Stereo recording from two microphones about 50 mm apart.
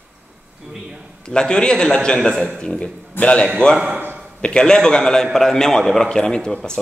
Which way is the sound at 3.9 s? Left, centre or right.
Right.